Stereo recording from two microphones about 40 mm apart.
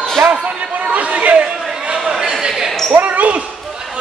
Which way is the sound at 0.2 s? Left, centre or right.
Right.